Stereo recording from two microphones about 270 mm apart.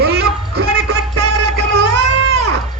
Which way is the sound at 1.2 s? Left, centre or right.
Right.